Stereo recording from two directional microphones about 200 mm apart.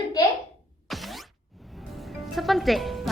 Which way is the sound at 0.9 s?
Centre (ahead or behind).